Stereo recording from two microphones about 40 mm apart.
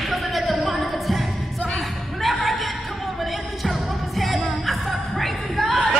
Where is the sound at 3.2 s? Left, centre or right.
Centre.